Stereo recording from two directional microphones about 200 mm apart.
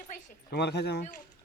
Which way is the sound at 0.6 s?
55° left (ahead or behind).